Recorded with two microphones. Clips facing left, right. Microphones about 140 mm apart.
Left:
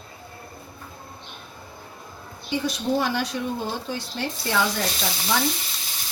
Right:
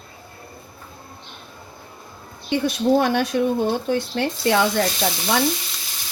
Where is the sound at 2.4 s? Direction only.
60° right (ahead or behind).